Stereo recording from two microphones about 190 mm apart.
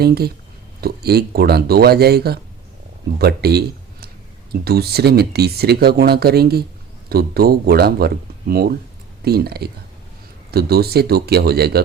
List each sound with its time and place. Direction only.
0.0 s speech: 55° right (ahead or behind)
4.6 s speech: 55° right (ahead or behind)